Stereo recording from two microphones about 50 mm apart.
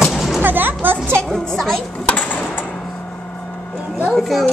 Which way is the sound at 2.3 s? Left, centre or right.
Left.